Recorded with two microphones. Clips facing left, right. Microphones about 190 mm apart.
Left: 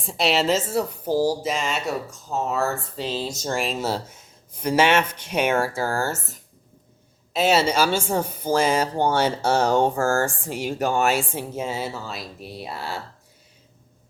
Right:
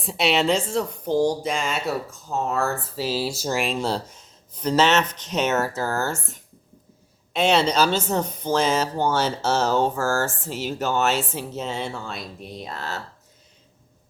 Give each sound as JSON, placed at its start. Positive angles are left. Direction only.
{"t": 0.0, "sound": "a woman's voice", "side_deg": 0}